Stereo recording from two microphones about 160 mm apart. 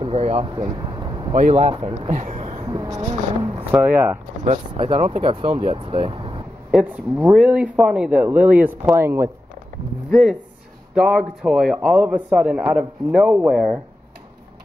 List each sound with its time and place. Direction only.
0.0 s speech: 40° right (ahead or behind)
2.0 s speech: 50° right (ahead or behind)
2.6 s a sound: 25° right (ahead or behind)
3.7 s speech: 10° right (ahead or behind)
4.7 s speech: 30° right (ahead or behind)
6.7 s speech: 10° right (ahead or behind)
11.0 s a man's voice: 5° right (ahead or behind)